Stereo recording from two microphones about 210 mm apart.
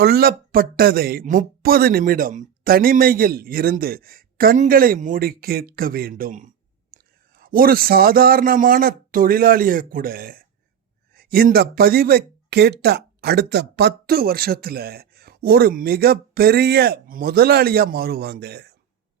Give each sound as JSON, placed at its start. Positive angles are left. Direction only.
{"t": 0.0, "sound": "a man's voice", "side_deg": -50}